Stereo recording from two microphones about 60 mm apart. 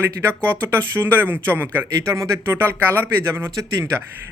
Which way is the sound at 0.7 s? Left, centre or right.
Right.